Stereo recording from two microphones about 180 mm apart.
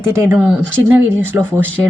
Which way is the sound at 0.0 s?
15° right (ahead or behind).